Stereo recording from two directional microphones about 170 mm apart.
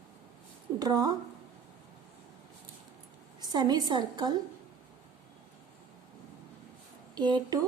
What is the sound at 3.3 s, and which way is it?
A woman's voice, 25° right (ahead or behind).